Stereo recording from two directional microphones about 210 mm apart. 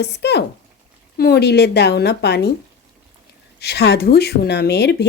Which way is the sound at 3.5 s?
50° left (ahead or behind).